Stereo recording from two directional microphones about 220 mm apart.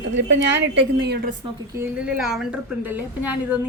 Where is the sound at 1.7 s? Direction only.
5° right (ahead or behind).